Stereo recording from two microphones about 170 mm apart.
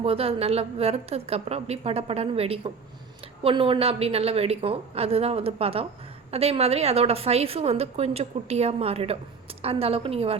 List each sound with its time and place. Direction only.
0.0 s a woman's voice: 35° right (ahead or behind)